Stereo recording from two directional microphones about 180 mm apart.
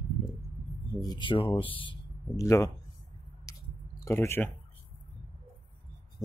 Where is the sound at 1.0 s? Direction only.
25° left (ahead or behind).